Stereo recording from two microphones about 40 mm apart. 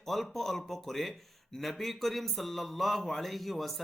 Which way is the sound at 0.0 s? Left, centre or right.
Centre.